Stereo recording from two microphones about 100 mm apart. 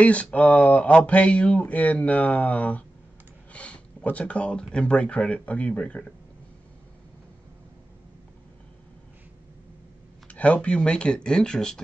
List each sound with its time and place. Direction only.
0.0 s speech: 15° left (ahead or behind)
10.2 s speech: 15° left (ahead or behind)